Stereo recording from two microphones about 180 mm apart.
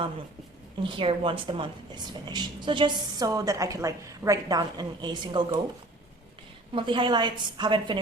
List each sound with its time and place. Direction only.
0.8 s a woman's voice: 30° right (ahead or behind)
6.7 s a woman's voice: 25° right (ahead or behind)